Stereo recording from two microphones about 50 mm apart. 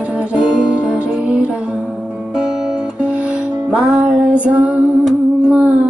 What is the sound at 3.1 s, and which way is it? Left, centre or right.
Music, right.